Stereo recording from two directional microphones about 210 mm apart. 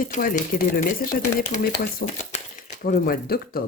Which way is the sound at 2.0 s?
35° left (ahead or behind).